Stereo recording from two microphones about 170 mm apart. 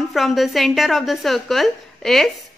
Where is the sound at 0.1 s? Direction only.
Centre (ahead or behind).